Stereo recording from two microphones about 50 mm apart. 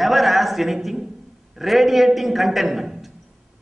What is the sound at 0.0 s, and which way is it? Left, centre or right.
A man's voice, centre.